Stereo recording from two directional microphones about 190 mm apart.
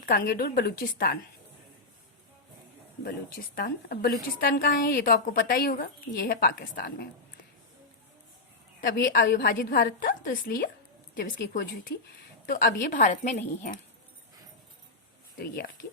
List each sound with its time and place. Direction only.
0.0 s a woman's voice: 45° left (ahead or behind)
3.0 s a woman's voice: 55° left (ahead or behind)
8.8 s a woman's voice: 45° left (ahead or behind)
12.5 s a woman's voice: 50° left (ahead or behind)
15.4 s speech: 55° left (ahead or behind)